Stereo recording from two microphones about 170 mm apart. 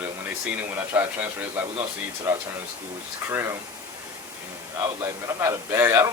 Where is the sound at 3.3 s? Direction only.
15° right (ahead or behind).